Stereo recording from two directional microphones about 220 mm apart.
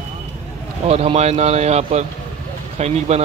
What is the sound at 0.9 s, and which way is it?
Speech, 30° right (ahead or behind).